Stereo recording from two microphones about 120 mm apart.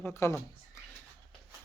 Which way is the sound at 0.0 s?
20° left (ahead or behind).